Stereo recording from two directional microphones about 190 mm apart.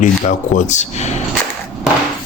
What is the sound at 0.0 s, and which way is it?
Speech, 40° left (ahead or behind).